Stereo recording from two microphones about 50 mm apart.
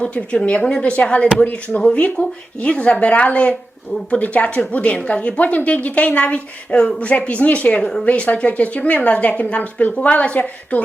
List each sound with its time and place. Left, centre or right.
0.0 s a woman's voice: left